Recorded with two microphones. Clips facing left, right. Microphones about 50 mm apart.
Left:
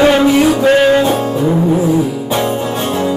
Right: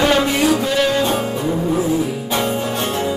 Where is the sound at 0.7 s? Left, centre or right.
Left.